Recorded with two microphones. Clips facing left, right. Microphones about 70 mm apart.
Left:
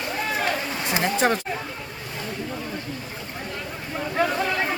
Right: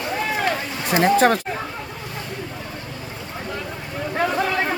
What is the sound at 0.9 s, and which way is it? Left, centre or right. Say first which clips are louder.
Speech: right 6 dB; right.